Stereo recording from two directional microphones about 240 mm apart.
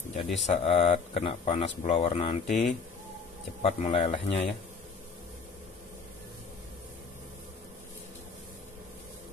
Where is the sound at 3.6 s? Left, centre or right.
Left.